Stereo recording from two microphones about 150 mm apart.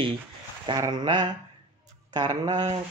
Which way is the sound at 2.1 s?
30° right (ahead or behind).